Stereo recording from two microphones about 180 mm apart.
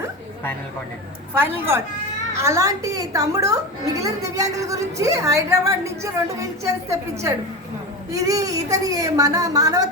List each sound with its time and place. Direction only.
1.3 s a woman's voice: 10° right (ahead or behind)